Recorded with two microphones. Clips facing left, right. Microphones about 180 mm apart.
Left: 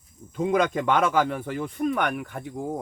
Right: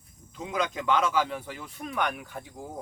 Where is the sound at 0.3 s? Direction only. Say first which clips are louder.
Left 8 dB; 50° left (ahead or behind).